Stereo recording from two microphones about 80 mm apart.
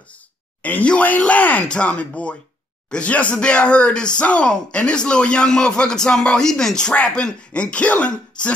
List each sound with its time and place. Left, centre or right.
0.6 s speech: centre